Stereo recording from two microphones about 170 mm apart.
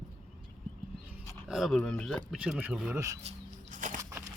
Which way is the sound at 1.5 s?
Centre (ahead or behind).